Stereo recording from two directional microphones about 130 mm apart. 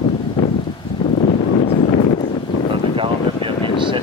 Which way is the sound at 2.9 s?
40° right (ahead or behind).